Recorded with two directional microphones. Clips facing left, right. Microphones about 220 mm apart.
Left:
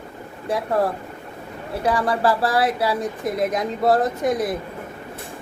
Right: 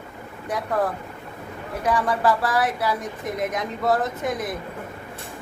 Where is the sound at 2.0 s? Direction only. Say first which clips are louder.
Left 2 dB; 30° left (ahead or behind).